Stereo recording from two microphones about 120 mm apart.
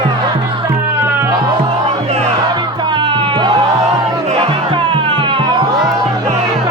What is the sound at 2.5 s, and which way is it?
Music, 40° right (ahead or behind).